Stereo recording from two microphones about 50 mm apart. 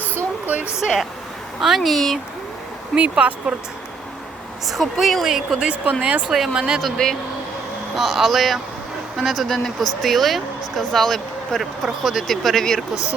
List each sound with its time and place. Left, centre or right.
0.4 s speech: right
1.6 s speech: centre
2.9 s speech: right
4.6 s speech: centre
5.3 s speech: centre
5.7 s speech: right
6.2 s speech: centre
7.9 s speech: centre